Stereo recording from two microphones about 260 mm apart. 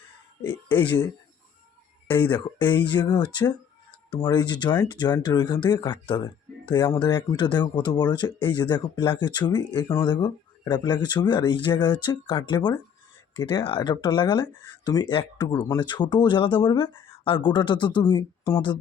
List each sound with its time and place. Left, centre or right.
0.4 s speech: centre
2.3 s speech: centre